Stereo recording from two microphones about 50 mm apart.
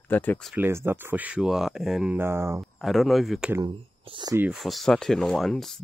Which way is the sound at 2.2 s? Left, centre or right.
Right.